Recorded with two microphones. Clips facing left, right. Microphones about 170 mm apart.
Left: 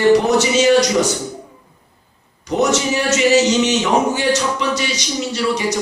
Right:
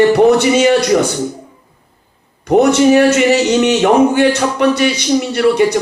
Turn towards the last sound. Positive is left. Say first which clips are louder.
# right 8 dB
turn(degrees=-55)  # may be behind; listen again after turning